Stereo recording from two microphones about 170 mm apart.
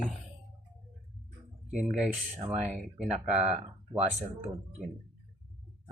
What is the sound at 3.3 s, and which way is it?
Speech, 40° right (ahead or behind).